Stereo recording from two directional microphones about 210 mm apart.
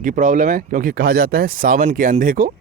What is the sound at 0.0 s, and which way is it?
Speech, 40° right (ahead or behind).